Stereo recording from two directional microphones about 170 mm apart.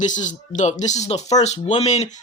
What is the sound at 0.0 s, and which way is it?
Speech, 45° left (ahead or behind).